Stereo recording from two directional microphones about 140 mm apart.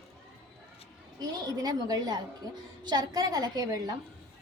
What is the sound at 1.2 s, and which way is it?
A woman's voice, 25° right (ahead or behind).